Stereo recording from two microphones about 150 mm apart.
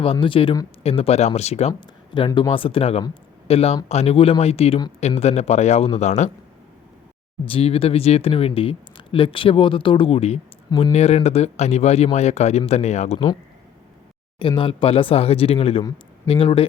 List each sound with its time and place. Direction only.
0.0 s speech: 35° left (ahead or behind)
2.1 s speech: 30° left (ahead or behind); by 6.3 s 50° left (ahead or behind)
7.4 s speech: 40° left (ahead or behind)
10.7 s speech: 25° left (ahead or behind)
10.9 s speech: 45° left (ahead or behind)
14.3 s speech: 35° left (ahead or behind)